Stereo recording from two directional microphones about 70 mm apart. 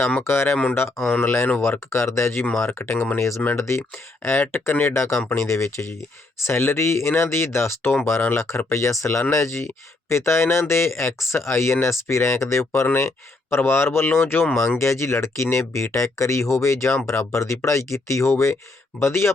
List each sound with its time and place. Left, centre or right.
0.3 s speech: left
4.9 s speech: left